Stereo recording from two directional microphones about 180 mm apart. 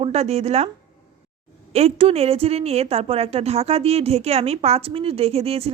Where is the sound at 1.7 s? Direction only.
35° right (ahead or behind).